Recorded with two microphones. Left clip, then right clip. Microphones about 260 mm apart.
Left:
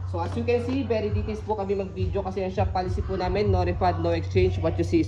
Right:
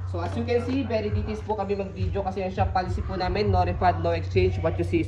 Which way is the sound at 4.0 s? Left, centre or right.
Left.